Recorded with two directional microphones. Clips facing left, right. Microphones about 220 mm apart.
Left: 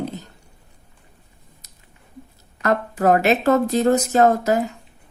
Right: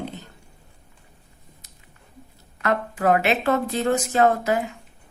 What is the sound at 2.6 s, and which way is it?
A woman's voice, 40° left (ahead or behind).